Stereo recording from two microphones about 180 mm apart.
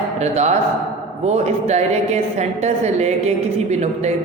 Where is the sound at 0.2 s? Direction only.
40° right (ahead or behind).